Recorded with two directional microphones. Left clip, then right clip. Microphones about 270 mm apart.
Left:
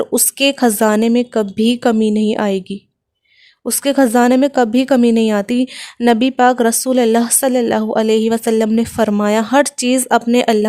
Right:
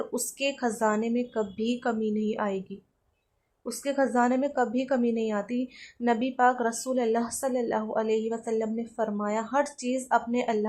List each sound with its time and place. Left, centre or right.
0.0 s speech: left